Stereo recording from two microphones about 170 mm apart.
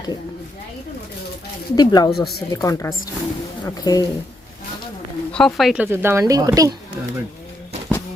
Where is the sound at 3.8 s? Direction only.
20° left (ahead or behind).